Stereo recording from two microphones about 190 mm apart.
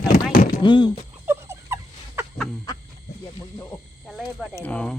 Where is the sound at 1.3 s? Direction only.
15° right (ahead or behind).